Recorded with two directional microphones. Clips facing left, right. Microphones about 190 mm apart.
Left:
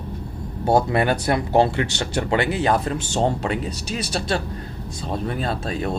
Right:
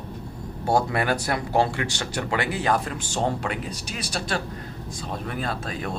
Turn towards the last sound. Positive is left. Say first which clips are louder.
# left 5 dB
turn(degrees=25)  # may be behind; listen again after turning